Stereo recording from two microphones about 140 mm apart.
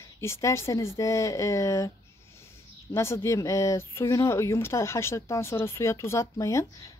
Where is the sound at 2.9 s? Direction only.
20° left (ahead or behind).